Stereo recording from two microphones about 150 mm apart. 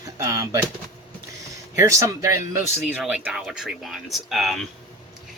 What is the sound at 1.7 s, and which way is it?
Speech, 20° right (ahead or behind).